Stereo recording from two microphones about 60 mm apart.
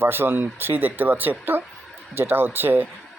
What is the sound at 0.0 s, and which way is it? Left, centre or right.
Speech, right.